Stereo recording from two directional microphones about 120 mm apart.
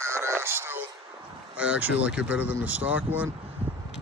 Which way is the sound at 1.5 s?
10° right (ahead or behind).